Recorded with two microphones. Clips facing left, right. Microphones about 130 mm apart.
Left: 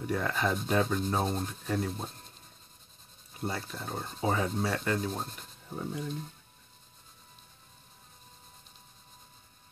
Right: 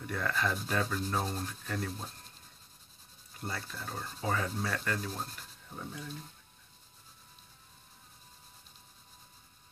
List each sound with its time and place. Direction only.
0.0 s speech: 20° left (ahead or behind)
0.7 s rub: 20° left (ahead or behind)
3.3 s rub: 20° left (ahead or behind)